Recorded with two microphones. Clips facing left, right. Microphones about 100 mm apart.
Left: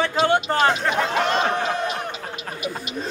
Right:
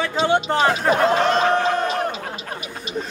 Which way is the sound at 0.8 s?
40° right (ahead or behind).